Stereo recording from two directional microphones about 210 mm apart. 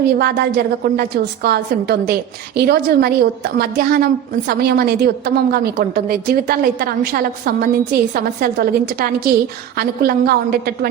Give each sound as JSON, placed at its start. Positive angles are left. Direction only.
{"t": 0.0, "sound": "a woman's voice", "side_deg": -50}